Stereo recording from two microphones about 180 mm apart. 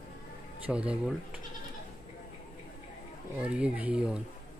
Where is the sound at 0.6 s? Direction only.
5° right (ahead or behind).